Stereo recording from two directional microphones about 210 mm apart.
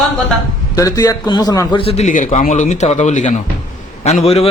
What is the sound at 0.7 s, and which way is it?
A man's voice, 15° left (ahead or behind).